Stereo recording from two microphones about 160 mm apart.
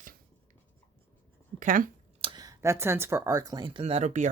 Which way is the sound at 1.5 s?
60° right (ahead or behind).